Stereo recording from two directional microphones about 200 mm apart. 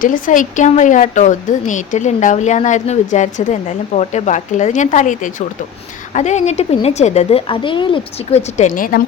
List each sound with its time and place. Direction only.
0.0 s speech: 40° left (ahead or behind)